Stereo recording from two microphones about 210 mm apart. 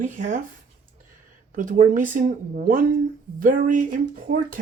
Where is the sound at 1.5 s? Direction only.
40° right (ahead or behind).